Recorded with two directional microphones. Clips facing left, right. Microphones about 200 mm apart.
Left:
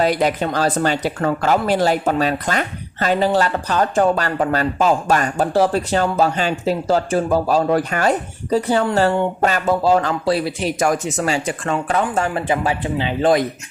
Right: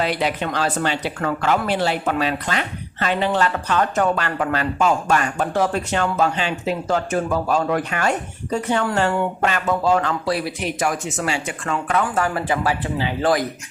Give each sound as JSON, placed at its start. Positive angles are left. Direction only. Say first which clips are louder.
{"t": 0.0, "sound": "speech", "louder": "left 5 dB", "side_deg": 45}
{"t": 10.8, "sound": "speech", "louder": "left 5 dB", "side_deg": 40}